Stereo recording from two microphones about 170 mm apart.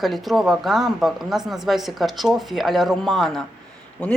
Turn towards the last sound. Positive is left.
turn(degrees=5)  # may be behind; listen again after turning